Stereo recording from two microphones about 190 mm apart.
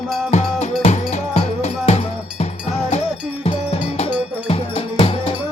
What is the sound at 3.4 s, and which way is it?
Cowbell, 35° left (ahead or behind).